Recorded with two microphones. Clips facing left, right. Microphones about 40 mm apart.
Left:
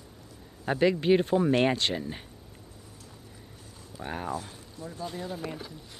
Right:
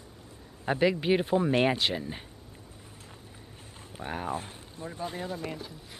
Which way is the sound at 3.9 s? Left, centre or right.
Right.